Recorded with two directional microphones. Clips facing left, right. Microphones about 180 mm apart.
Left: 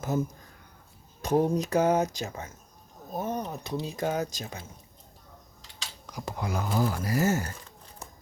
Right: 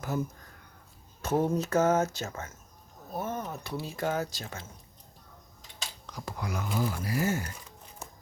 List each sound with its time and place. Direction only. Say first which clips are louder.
1.2 s speech: left 3 dB; 15° left (ahead or behind)
6.1 s a sound: left 4 dB; 15° left (ahead or behind)
6.4 s speech: left 4 dB; 30° left (ahead or behind)
6.7 s speech: left 3 dB; 45° left (ahead or behind)